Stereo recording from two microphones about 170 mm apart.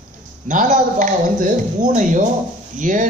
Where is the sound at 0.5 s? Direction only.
50° right (ahead or behind).